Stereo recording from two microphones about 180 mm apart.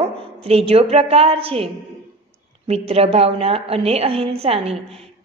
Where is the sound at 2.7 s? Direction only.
35° right (ahead or behind).